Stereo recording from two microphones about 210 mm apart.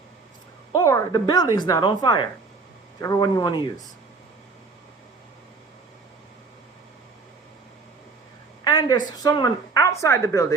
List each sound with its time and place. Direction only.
0.7 s a woman's voice: 15° left (ahead or behind)
8.6 s a woman's voice: 20° left (ahead or behind)